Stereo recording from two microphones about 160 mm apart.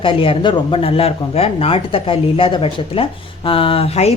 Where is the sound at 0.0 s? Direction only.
35° left (ahead or behind).